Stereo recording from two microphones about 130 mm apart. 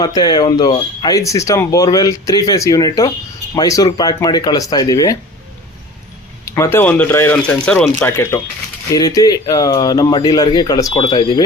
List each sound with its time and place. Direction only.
0.0 s speech: 30° left (ahead or behind)
6.4 s speech: 20° left (ahead or behind)